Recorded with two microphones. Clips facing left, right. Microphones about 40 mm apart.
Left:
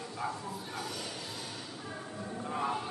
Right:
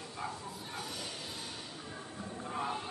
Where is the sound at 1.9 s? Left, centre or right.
Centre.